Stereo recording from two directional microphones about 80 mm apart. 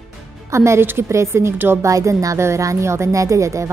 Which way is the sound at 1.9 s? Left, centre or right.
Right.